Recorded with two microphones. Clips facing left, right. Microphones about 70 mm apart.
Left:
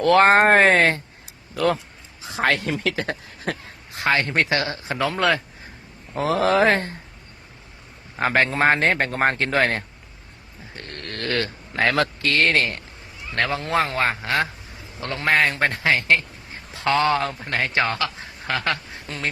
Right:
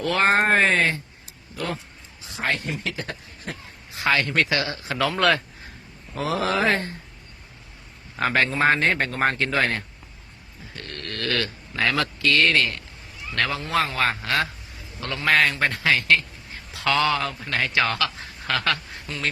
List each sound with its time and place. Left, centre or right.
0.0 s speech: left
1.5 s speech: left
2.4 s speech: left
4.1 s speech: left
5.1 s speech: centre
6.1 s speech: left
8.2 s a man's voice: left
15.0 s a man's voice: left
19.1 s speech: left